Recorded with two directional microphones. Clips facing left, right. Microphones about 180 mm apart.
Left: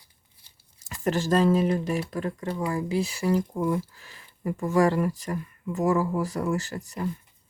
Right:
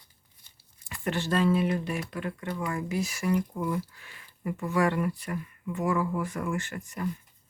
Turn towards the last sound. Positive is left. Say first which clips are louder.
# left 4 dB
turn(degrees=40)  # may be behind; listen again after turning